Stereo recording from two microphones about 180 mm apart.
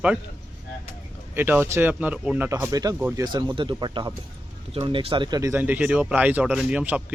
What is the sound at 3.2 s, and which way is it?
Speech, 20° right (ahead or behind).